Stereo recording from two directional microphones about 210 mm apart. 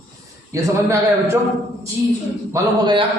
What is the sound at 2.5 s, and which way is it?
Speech, 20° right (ahead or behind).